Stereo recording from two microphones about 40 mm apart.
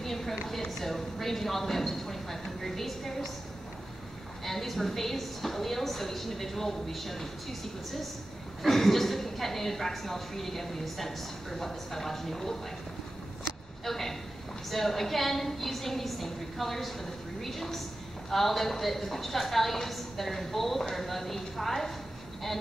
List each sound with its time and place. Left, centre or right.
0.0 s a sound: centre
0.5 s a woman's voice: centre
4.5 s a woman's voice: centre
8.6 s a woman's voice: centre
13.8 s a sound: centre
14.7 s a woman's voice: centre